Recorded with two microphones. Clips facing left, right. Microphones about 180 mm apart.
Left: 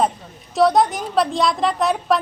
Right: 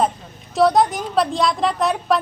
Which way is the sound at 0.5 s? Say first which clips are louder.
Even; centre (ahead or behind).